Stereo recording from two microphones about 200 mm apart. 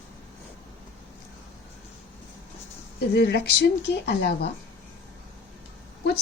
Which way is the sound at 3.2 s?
55° left (ahead or behind).